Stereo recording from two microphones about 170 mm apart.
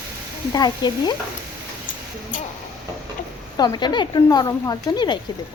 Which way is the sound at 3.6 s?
25° left (ahead or behind).